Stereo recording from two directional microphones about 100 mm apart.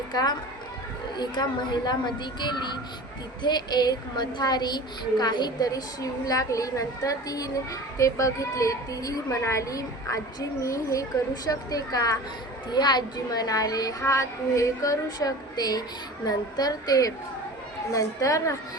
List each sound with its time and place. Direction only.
0.1 s a woman's voice: 45° left (ahead or behind)